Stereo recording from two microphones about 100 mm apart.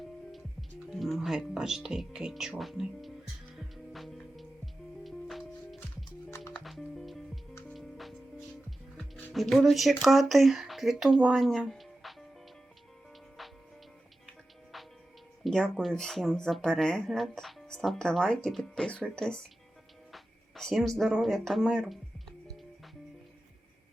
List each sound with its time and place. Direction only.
0.0 s music: centre (ahead or behind)
0.9 s speech: centre (ahead or behind)
3.5 s music: centre (ahead or behind)
9.0 s music: 20° left (ahead or behind)
9.3 s speech: centre (ahead or behind)
11.3 s music: 5° left (ahead or behind)
15.4 s speech: 5° left (ahead or behind)
20.1 s a sound: centre (ahead or behind)